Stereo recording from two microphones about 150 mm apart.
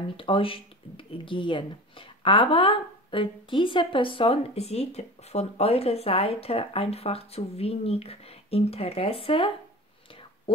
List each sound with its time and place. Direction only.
0.2 s speech: 35° left (ahead or behind)